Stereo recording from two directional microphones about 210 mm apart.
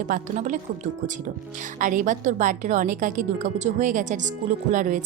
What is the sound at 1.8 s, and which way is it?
Speech, 40° right (ahead or behind).